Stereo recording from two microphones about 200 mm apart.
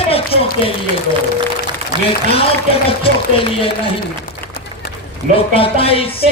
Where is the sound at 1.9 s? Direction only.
20° right (ahead or behind).